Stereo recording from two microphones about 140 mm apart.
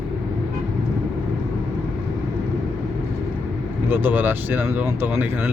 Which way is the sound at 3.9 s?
15° right (ahead or behind).